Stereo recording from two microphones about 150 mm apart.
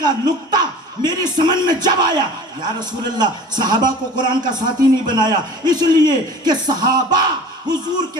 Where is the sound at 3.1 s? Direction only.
30° right (ahead or behind).